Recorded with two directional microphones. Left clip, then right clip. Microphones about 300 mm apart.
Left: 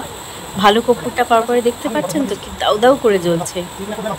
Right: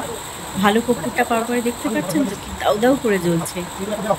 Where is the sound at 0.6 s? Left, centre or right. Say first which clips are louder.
Left 5 dB; centre.